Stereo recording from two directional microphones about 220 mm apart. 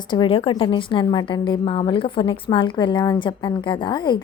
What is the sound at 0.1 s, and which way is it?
A woman's voice, 25° left (ahead or behind).